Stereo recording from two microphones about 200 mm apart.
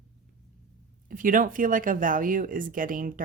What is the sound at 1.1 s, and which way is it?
Speech, 40° right (ahead or behind).